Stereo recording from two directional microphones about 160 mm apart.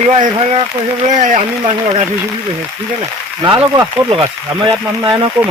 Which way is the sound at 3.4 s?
25° right (ahead or behind).